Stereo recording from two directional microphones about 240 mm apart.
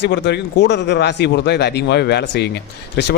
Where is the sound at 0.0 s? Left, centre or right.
Left.